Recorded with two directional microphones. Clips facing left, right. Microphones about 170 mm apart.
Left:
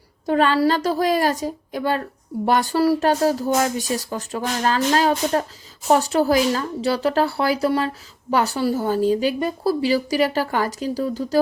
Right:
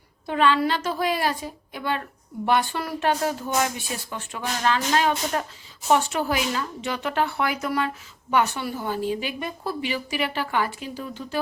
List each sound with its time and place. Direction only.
0.3 s speech: 40° left (ahead or behind)